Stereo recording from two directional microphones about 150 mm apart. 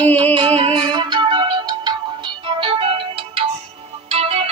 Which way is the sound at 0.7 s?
30° right (ahead or behind).